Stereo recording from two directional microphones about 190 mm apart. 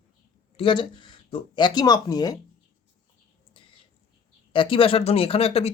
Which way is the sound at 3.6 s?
25° left (ahead or behind).